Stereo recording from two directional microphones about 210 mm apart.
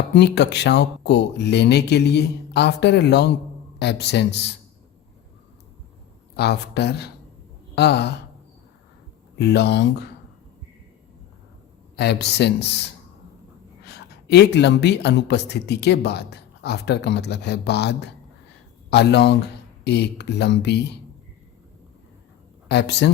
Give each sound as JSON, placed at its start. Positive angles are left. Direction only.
{"t": 0.1, "sound": "speech", "side_deg": 55}
{"t": 6.3, "sound": "speech", "side_deg": 50}
{"t": 9.4, "sound": "speech", "side_deg": 55}
{"t": 11.9, "sound": "speech", "side_deg": 50}
{"t": 22.7, "sound": "speech", "side_deg": 55}